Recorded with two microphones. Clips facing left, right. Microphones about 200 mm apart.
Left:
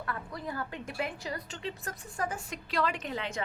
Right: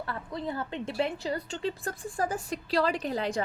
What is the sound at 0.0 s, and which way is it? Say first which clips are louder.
A woman's voice: right 3 dB; 25° right (ahead or behind).